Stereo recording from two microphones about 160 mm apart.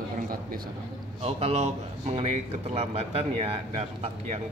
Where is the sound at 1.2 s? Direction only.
40° right (ahead or behind).